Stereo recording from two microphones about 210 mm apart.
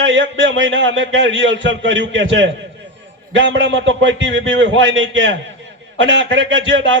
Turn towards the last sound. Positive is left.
turn(degrees=-60)  # may be behind; listen again after turning